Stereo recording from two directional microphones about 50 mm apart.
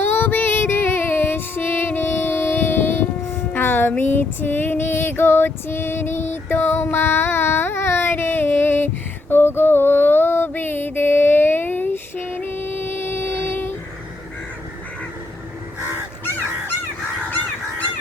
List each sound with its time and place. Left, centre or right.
0.0 s music: left
3.5 s female singing: left
6.9 s carnatic music: left
9.3 s mantra: left